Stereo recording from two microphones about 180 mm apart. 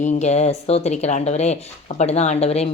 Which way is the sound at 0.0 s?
40° left (ahead or behind).